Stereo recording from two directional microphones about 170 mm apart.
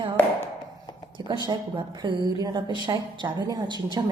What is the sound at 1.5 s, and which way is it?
A woman's voice, 25° right (ahead or behind).